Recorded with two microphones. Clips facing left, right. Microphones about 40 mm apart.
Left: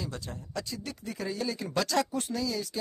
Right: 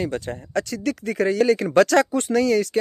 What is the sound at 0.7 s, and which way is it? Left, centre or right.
Speech, right.